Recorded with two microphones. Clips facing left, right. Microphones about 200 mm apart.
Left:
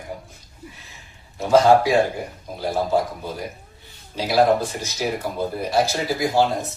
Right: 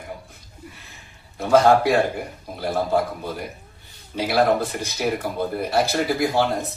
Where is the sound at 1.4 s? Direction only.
55° right (ahead or behind).